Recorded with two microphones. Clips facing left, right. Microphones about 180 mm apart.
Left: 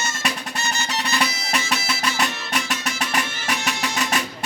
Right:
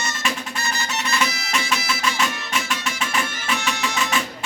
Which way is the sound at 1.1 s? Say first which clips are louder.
Even; 35° left (ahead or behind).